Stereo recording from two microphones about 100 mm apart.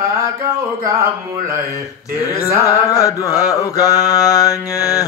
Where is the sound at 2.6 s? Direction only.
35° left (ahead or behind).